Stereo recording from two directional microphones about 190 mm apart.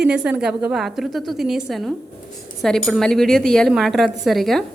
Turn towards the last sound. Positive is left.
turn(degrees=0)  # may be behind; listen again after turning